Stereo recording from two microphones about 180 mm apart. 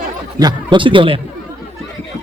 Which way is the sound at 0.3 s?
25° right (ahead or behind).